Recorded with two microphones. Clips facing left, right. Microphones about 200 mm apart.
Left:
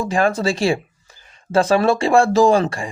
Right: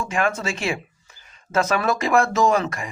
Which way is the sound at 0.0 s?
35° left (ahead or behind).